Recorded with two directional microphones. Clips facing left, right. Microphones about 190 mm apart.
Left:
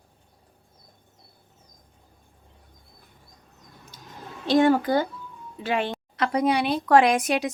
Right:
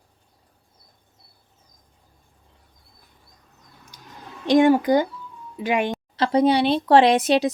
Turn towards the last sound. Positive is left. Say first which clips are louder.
# right 5 dB
turn(degrees=-30)  # may be behind; listen again after turning